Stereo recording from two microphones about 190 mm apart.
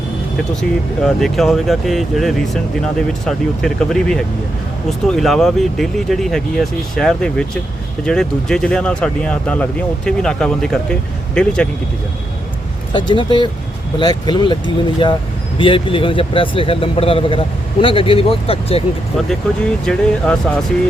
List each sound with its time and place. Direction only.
1.0 s speech: centre (ahead or behind)
12.9 s speech: 25° left (ahead or behind)
19.8 s speech: 5° left (ahead or behind)